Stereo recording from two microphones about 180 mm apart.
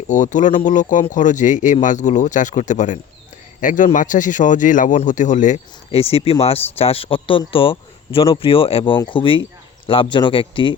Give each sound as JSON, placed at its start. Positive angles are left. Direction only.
{"t": 0.1, "sound": "speech", "side_deg": 45}